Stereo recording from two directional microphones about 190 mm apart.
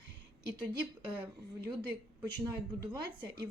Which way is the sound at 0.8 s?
25° right (ahead or behind).